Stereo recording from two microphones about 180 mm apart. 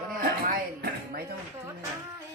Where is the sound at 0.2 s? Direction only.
55° right (ahead or behind).